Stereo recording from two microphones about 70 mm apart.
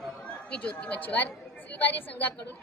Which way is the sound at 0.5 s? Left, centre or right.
Centre.